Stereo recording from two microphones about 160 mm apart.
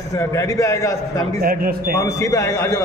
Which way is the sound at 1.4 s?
65° right (ahead or behind).